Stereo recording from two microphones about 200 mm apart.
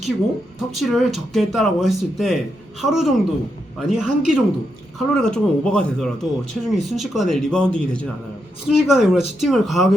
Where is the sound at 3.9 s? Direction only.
Centre (ahead or behind).